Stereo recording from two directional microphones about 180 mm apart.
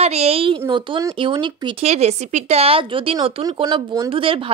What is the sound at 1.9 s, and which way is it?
A woman's voice, 40° right (ahead or behind).